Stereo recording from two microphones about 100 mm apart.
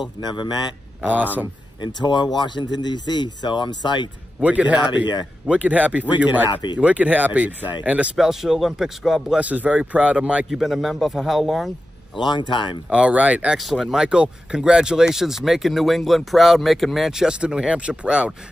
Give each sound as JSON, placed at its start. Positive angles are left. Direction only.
{"t": 0.0, "sound": "speech", "side_deg": 45}
{"t": 1.0, "sound": "a man's voice", "side_deg": -15}
{"t": 1.8, "sound": "speech", "side_deg": 50}
{"t": 4.4, "sound": "a man's voice", "side_deg": -15}
{"t": 10.5, "sound": "speech", "side_deg": 0}
{"t": 12.2, "sound": "speech", "side_deg": 50}
{"t": 12.9, "sound": "a man's voice", "side_deg": -15}
{"t": 13.6, "sound": "speech", "side_deg": 0}